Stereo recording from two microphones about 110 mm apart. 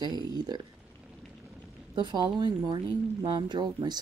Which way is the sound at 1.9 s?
45° right (ahead or behind).